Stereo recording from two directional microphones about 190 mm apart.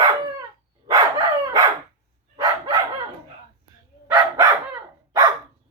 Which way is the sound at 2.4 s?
20° right (ahead or behind).